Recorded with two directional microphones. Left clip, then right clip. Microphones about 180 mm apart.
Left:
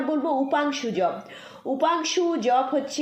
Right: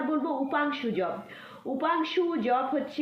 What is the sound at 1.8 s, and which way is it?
Speech, 30° left (ahead or behind).